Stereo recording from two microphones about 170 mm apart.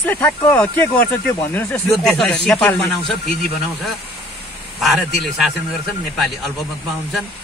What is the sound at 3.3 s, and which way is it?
Speech, 70° left (ahead or behind).